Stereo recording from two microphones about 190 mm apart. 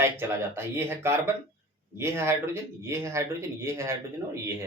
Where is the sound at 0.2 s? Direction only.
15° right (ahead or behind).